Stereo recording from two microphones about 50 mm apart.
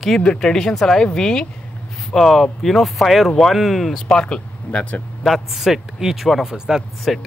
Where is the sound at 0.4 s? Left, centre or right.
Centre.